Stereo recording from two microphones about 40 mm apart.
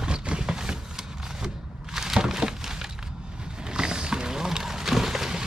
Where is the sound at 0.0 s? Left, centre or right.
Right.